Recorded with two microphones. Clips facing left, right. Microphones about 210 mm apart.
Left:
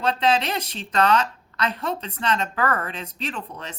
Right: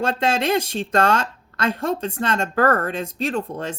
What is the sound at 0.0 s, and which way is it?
A woman's voice, 50° right (ahead or behind).